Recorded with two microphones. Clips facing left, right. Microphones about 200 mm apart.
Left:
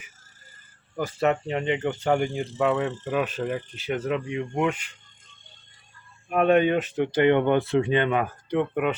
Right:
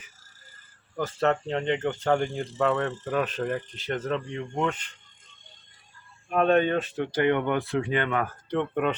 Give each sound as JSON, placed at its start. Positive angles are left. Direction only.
{"t": 0.9, "sound": "speech", "side_deg": 10}
{"t": 6.2, "sound": "speech", "side_deg": 10}